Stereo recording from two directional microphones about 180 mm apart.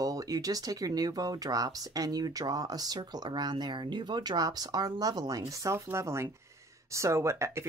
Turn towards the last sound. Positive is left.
turn(degrees=-15)  # may be behind; listen again after turning